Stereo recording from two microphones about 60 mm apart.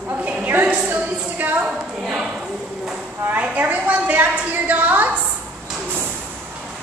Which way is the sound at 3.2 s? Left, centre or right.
Right.